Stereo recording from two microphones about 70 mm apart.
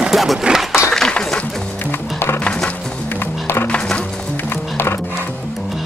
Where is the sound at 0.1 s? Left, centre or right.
Centre.